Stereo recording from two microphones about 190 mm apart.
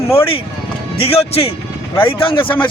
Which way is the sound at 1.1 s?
30° left (ahead or behind).